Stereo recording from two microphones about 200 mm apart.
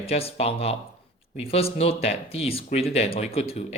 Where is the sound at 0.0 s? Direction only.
30° left (ahead or behind).